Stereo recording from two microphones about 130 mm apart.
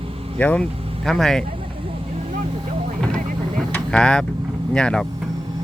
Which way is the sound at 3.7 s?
5° left (ahead or behind).